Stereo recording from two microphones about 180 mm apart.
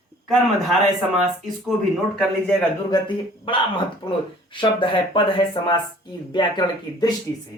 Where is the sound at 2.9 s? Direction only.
25° left (ahead or behind).